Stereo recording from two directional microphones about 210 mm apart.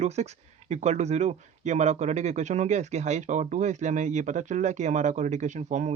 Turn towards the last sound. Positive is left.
turn(degrees=-35)  # may be behind; listen again after turning